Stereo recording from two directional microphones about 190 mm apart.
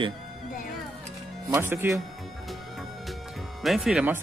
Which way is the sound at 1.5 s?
10° right (ahead or behind).